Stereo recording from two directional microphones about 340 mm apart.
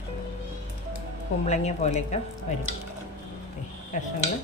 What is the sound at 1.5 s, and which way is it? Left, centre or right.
A woman's voice, centre.